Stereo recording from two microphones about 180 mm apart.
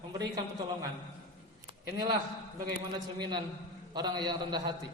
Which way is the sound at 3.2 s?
25° right (ahead or behind).